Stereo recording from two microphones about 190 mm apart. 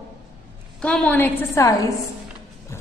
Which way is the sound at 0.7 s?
5° left (ahead or behind).